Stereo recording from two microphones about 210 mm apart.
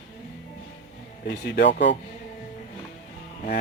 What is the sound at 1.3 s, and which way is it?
Speech, 50° left (ahead or behind).